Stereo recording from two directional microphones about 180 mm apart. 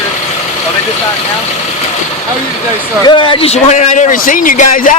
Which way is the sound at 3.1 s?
25° left (ahead or behind).